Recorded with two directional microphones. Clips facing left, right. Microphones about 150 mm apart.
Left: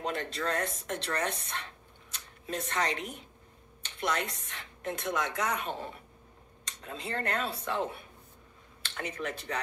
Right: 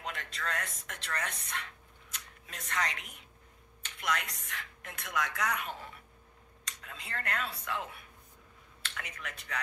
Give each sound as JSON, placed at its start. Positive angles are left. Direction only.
{"t": 0.0, "sound": "a woman's voice", "side_deg": 30}